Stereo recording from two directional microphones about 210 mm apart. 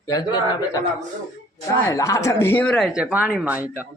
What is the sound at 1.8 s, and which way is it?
Speech, 15° left (ahead or behind).